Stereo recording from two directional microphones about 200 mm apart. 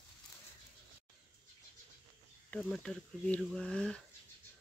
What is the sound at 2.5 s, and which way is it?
Speech, centre (ahead or behind).